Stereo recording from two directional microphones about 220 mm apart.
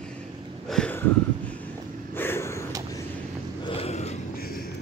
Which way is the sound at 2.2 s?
10° left (ahead or behind).